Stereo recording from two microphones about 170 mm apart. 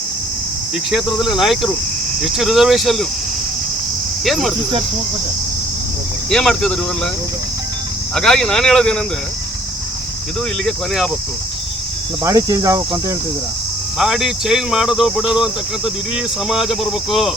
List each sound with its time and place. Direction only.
1.3 s speech: centre (ahead or behind)
4.2 s speech: centre (ahead or behind)
6.3 s speech: centre (ahead or behind)
8.1 s speech: 5° left (ahead or behind)
10.7 s speech: centre (ahead or behind)
12.2 s cricket: 20° right (ahead or behind)
14.0 s speech: centre (ahead or behind)